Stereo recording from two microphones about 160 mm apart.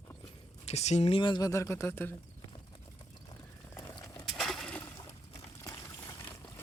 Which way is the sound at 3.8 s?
20° left (ahead or behind).